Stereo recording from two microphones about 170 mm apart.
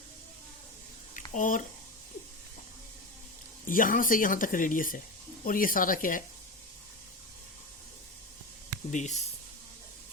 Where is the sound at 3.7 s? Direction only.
55° left (ahead or behind).